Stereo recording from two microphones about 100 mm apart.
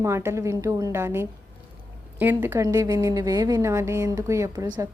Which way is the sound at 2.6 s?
35° right (ahead or behind).